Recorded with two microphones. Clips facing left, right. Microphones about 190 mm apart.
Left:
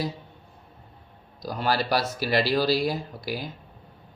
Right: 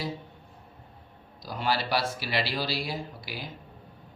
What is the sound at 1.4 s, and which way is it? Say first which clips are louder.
Speech: left 3 dB; 40° left (ahead or behind).